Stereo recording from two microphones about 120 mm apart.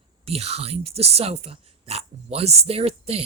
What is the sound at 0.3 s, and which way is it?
Speech, 55° right (ahead or behind).